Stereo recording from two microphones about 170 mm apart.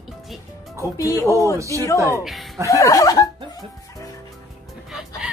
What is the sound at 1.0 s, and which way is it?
A woman's voice, 20° left (ahead or behind).